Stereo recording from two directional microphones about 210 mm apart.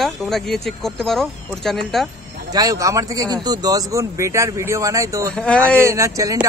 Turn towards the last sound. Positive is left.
turn(degrees=-15)  # may be behind; listen again after turning